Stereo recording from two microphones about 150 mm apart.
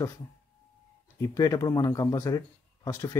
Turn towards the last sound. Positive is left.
turn(degrees=20)  # may be behind; listen again after turning